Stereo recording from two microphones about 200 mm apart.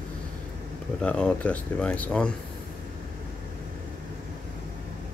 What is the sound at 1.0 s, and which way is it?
Speech, 5° left (ahead or behind).